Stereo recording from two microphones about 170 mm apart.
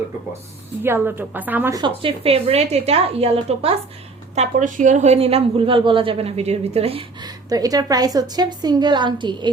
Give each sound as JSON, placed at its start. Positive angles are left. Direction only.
{"t": 0.8, "sound": "a woman's voice", "side_deg": -10}
{"t": 1.7, "sound": "a woman's voice", "side_deg": -30}
{"t": 4.4, "sound": "a woman's voice", "side_deg": -45}